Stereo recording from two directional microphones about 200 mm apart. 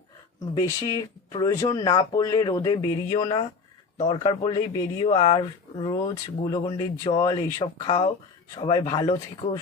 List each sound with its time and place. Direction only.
0.5 s speech: 15° left (ahead or behind)